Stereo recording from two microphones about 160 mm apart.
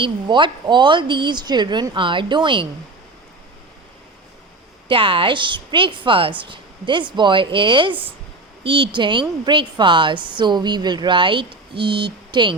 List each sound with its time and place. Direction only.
0.0 s a woman's voice: 30° right (ahead or behind)
4.9 s a woman's voice: 35° right (ahead or behind)